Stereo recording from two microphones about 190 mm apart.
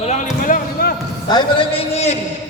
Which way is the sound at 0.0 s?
35° left (ahead or behind).